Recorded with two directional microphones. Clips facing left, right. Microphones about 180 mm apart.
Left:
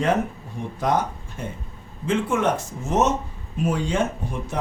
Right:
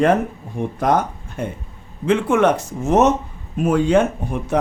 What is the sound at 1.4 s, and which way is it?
A man's voice, 60° right (ahead or behind).